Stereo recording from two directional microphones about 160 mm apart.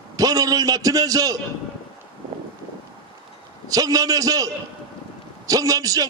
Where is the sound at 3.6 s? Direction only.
20° right (ahead or behind).